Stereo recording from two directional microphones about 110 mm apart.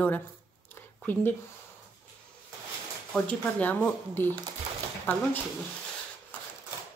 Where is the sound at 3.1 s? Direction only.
10° left (ahead or behind).